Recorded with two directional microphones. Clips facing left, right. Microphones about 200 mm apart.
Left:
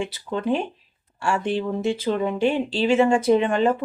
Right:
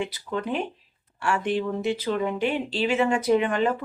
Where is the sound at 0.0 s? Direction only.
30° left (ahead or behind).